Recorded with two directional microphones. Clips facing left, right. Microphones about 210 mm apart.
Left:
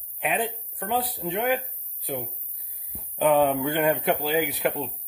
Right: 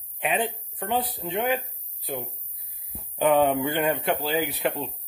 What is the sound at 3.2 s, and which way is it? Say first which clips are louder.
Speech: even; centre (ahead or behind).